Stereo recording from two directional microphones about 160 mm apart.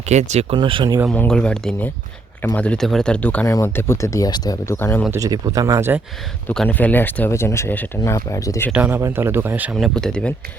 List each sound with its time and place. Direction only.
0.0 s speech: 45° right (ahead or behind)
0.5 s speech: 30° right (ahead or behind)
1.0 s speech: 5° left (ahead or behind)
5.1 s speech: 20° right (ahead or behind)
6.5 s speech: 5° left (ahead or behind)
8.7 s speech: 10° right (ahead or behind)
9.7 s speech: 5° left (ahead or behind)